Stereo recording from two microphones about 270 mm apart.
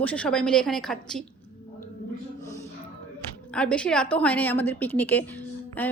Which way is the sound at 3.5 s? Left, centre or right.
Centre.